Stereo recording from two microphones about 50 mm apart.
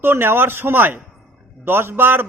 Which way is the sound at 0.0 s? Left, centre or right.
Right.